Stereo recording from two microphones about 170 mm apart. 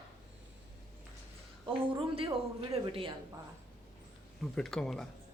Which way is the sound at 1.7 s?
30° right (ahead or behind).